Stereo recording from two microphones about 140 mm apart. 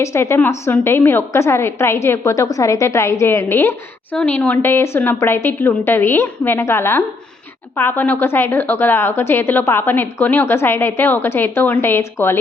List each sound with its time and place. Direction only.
0.0 s a woman's voice: 20° left (ahead or behind)